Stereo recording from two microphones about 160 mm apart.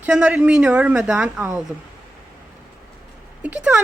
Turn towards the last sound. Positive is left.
turn(degrees=-5)  # may be behind; listen again after turning